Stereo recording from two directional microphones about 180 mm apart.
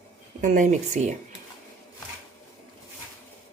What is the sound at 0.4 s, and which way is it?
Speech, 45° right (ahead or behind).